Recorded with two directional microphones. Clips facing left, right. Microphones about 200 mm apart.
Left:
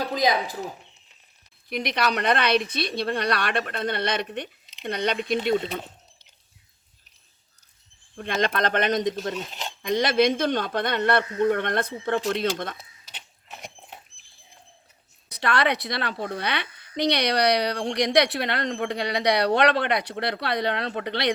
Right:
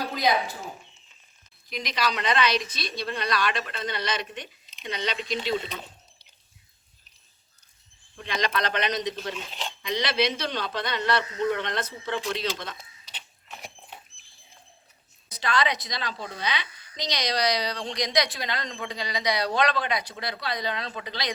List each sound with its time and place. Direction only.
1.7 s a woman's voice: 60° left (ahead or behind)
8.1 s speech: 50° left (ahead or behind)
15.3 s a woman's voice: 65° left (ahead or behind)